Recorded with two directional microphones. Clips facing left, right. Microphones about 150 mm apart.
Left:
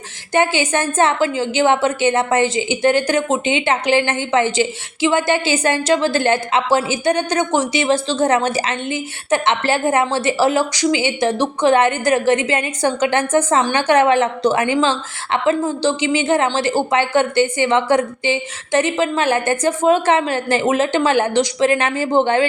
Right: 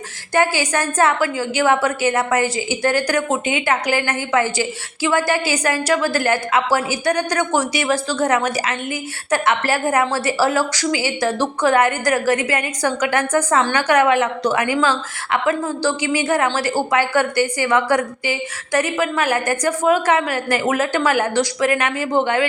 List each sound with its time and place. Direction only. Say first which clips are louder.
0.3 s a woman's voice: left 1 dB; 25° left (ahead or behind)